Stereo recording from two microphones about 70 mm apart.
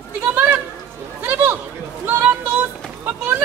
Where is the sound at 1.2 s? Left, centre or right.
Right.